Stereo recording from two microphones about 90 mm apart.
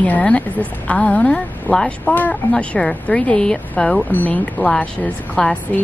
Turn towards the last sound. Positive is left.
turn(degrees=10)  # may be behind; listen again after turning